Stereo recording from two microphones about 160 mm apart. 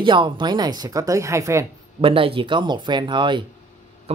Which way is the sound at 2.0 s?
35° right (ahead or behind).